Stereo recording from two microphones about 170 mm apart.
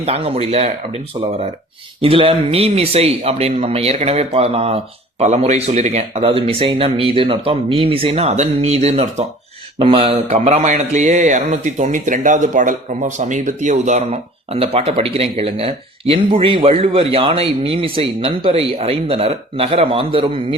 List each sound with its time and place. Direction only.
0.0 s mantra: 35° right (ahead or behind)
2.0 s mantra: 35° right (ahead or behind)